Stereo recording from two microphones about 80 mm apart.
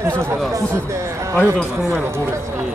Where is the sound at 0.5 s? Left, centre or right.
Right.